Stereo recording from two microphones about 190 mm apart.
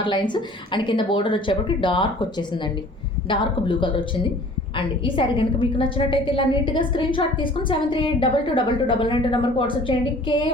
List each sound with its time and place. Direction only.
0.0 s a woman's voice: 25° left (ahead or behind)
3.2 s a woman's voice: 25° left (ahead or behind)